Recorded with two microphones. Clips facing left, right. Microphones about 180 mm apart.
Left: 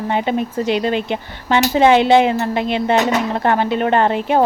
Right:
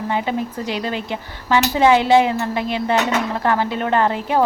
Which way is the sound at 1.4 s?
25° left (ahead or behind).